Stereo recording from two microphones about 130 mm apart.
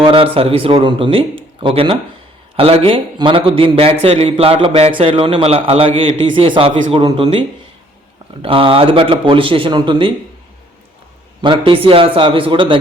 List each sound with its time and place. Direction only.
0.0 s a man's voice: 40° right (ahead or behind)
11.4 s speech: 40° right (ahead or behind)